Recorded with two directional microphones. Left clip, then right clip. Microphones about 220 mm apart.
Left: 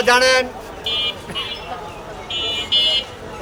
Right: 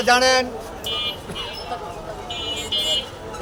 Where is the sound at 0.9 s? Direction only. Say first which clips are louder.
Left 4 dB; 50° left (ahead or behind).